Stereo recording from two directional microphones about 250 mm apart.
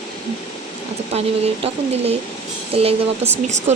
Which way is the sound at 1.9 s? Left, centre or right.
Right.